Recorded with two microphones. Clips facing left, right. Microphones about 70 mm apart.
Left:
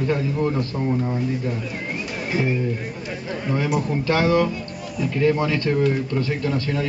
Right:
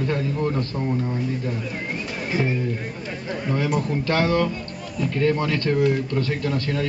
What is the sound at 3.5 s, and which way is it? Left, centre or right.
Speech, centre.